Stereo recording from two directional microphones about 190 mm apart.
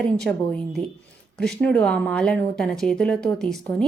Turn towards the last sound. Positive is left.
turn(degrees=0)  # may be behind; listen again after turning